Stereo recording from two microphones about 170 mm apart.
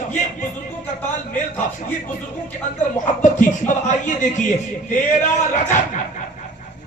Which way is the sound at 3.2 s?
45° left (ahead or behind).